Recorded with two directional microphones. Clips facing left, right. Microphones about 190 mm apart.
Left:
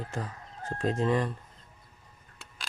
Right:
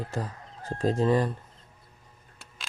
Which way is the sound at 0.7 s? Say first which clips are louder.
Right 3 dB; 35° right (ahead or behind).